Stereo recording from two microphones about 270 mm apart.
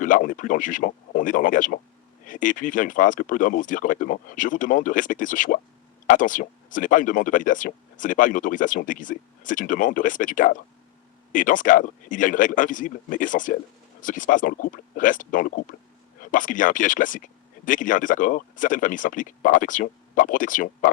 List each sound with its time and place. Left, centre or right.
0.0 s speech: left